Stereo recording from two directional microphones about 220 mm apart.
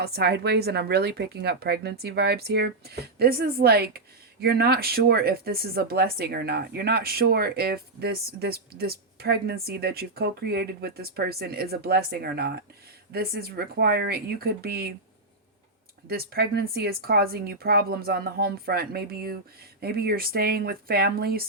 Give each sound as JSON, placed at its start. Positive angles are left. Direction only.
{"t": 0.0, "sound": "speech", "side_deg": -45}
{"t": 16.0, "sound": "speech", "side_deg": -45}